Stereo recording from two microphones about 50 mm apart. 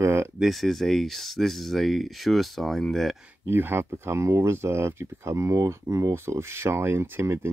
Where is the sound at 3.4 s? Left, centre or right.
Right.